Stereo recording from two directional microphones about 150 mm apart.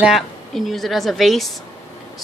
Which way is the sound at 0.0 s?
Centre (ahead or behind).